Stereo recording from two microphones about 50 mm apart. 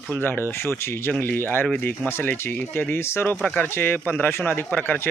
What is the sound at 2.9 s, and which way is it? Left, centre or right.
Speech, left.